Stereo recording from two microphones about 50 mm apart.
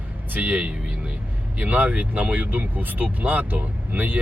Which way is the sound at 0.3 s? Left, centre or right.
Right.